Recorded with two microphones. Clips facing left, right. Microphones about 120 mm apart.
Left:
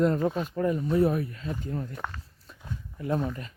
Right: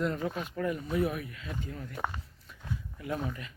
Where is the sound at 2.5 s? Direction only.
35° left (ahead or behind).